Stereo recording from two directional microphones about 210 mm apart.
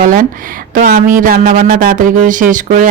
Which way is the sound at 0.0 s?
40° right (ahead or behind).